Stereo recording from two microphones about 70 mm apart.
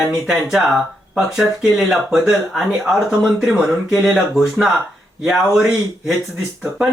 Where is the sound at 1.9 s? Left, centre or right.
Centre.